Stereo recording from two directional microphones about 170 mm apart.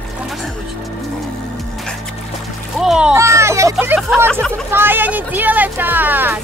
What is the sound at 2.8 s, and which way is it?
Speech, 5° right (ahead or behind).